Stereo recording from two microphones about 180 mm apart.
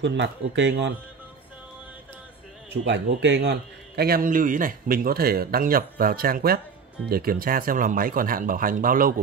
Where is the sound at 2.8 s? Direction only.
85° right.